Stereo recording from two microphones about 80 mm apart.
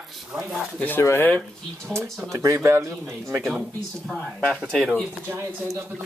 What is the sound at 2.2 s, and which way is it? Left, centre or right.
Speech, right.